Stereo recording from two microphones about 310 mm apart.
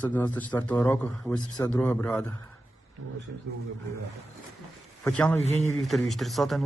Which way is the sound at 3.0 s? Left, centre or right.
Right.